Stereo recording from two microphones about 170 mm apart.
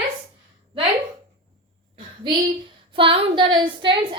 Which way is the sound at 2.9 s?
30° right (ahead or behind).